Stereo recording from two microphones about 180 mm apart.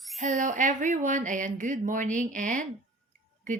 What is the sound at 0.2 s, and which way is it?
Speech, 45° right (ahead or behind).